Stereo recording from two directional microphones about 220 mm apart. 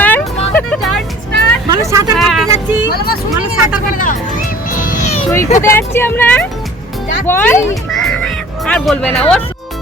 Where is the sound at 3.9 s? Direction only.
40° left (ahead or behind).